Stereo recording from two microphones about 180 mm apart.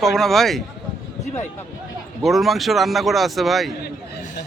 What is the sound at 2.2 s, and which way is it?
Speech, centre (ahead or behind).